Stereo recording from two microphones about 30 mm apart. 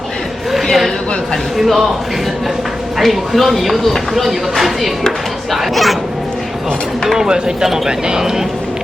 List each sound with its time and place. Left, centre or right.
0.5 s a sound: centre
1.5 s speech: centre
3.0 s speech: centre
7.3 s speech: right